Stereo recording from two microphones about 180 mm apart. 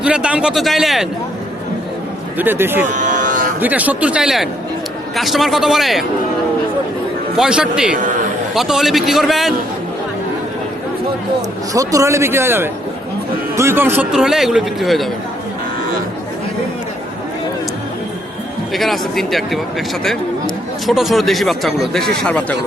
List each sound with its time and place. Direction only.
0.0 s speech: 5° right (ahead or behind)
2.4 s a man's voice: 10° right (ahead or behind)
2.9 s livestock: 45° right (ahead or behind)
3.6 s a man's voice: 10° right (ahead or behind)
7.3 s speech: 5° right (ahead or behind)
11.7 s a man's voice: 20° right (ahead or behind); by 15.1 s centre (ahead or behind)
18.7 s speech: centre (ahead or behind)
20.8 s speech: centre (ahead or behind)